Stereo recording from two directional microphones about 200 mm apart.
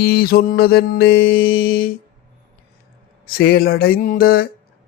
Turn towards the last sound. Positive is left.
turn(degrees=45)  # may be behind; listen again after turning